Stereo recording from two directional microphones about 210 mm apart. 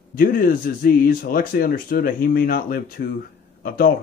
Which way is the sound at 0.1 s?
40° left (ahead or behind).